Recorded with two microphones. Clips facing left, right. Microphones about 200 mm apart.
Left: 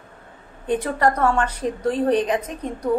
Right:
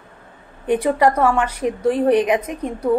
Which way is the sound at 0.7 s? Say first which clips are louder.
Right 4 dB; 10° right (ahead or behind).